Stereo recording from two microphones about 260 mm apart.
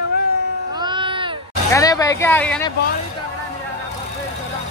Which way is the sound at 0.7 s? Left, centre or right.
Centre.